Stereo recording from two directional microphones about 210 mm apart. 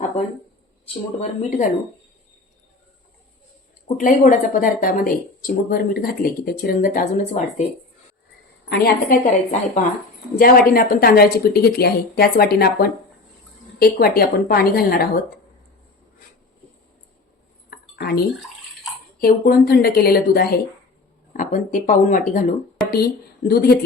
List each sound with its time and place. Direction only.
3.9 s speech: 35° left (ahead or behind)
8.7 s speech: 45° left (ahead or behind)
17.7 s chink: 50° left (ahead or behind)
19.2 s speech: 45° left (ahead or behind)